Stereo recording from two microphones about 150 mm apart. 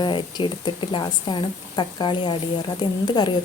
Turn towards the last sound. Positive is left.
turn(degrees=30)  # may be behind; listen again after turning